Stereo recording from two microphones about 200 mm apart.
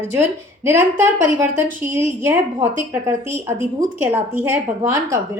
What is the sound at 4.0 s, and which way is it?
A woman's voice, 10° right (ahead or behind).